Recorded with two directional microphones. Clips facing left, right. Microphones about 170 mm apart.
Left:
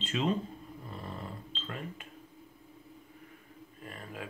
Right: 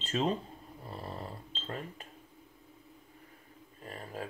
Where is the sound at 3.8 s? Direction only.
35° right (ahead or behind).